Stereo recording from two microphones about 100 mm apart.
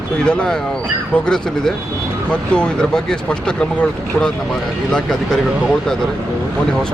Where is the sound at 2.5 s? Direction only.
10° left (ahead or behind).